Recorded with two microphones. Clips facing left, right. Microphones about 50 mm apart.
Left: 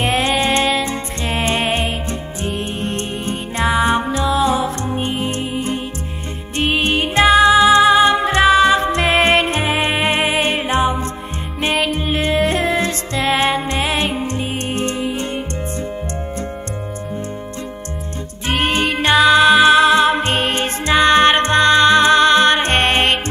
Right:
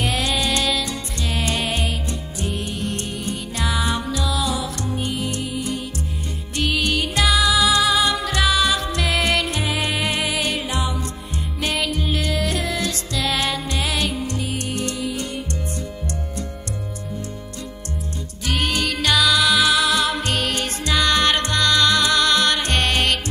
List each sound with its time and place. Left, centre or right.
0.0 s music: left
18.5 s music: left